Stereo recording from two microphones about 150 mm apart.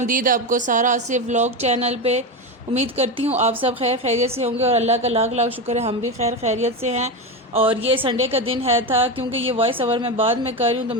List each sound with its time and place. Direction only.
0.0 s a woman's voice: 65° right (ahead or behind); by 7.1 s 50° right (ahead or behind)
7.5 s a woman's voice: 40° right (ahead or behind)